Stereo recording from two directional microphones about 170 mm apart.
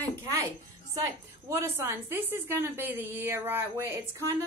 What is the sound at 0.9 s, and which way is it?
Speech, 20° right (ahead or behind).